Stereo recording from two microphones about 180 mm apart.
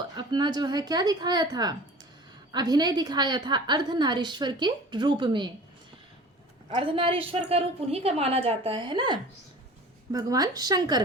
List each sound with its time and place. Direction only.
0.2 s a woman's voice: 25° right (ahead or behind)
6.7 s a woman's voice: 30° right (ahead or behind)